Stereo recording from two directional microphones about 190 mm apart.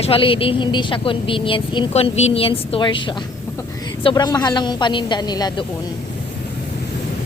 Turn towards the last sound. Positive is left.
turn(degrees=20)  # may be behind; listen again after turning